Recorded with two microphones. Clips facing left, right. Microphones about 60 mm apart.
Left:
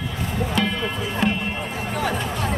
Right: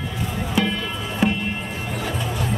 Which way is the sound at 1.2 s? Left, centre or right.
Centre.